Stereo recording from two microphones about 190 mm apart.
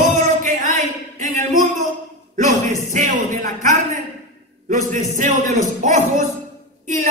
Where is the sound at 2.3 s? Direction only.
40° right (ahead or behind).